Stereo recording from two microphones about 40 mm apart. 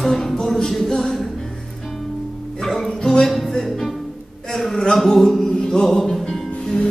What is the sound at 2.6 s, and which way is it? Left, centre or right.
Music, centre.